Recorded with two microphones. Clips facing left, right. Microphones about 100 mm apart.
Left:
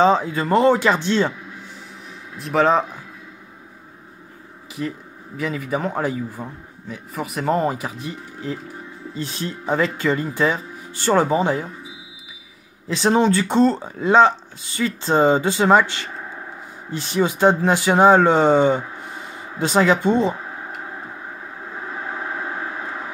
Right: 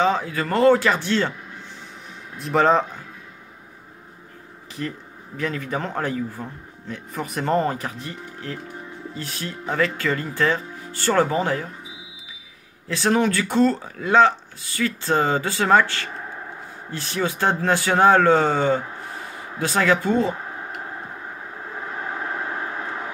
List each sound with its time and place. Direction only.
0.0 s speech: 25° left (ahead or behind)
2.3 s speech: centre (ahead or behind)
5.4 s speech: 10° left (ahead or behind)
12.8 s speech: 20° left (ahead or behind)